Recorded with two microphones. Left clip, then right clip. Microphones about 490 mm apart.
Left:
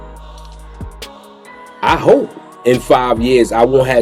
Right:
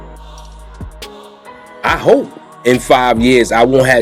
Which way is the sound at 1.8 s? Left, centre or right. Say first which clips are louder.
Left 1 dB; right.